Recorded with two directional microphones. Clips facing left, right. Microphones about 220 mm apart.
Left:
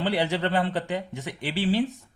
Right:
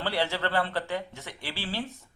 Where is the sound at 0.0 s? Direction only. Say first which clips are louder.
Left 4 dB; 15° left (ahead or behind).